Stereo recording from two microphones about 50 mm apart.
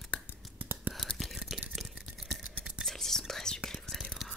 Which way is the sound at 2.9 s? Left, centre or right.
Centre.